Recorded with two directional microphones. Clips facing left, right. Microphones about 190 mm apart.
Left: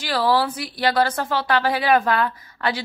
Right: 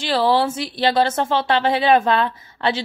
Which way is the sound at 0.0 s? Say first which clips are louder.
Right 2 dB; 25° right (ahead or behind).